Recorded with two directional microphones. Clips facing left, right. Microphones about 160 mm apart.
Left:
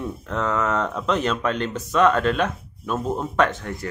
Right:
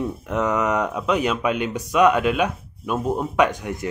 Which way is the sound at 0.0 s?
15° right (ahead or behind).